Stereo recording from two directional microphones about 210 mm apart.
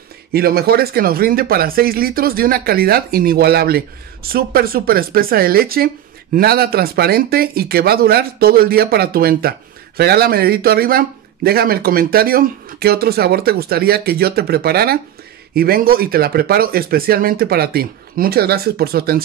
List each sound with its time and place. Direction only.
0.3 s speech: 45° right (ahead or behind)